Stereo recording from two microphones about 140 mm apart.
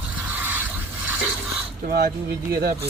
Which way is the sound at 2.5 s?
90° right.